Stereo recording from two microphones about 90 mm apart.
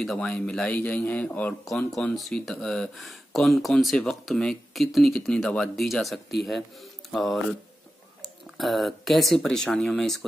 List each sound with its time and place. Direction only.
0.0 s speech: 10° left (ahead or behind)
0.7 s a man's voice: 20° left (ahead or behind)
2.0 s speech: 5° left (ahead or behind)